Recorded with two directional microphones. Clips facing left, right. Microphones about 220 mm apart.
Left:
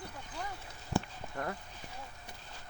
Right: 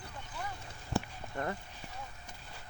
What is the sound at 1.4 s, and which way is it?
Speech, centre (ahead or behind).